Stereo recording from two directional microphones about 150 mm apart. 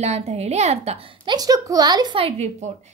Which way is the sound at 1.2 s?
25° right (ahead or behind).